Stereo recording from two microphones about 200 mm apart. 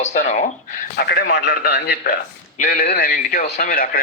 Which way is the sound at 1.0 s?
55° left (ahead or behind).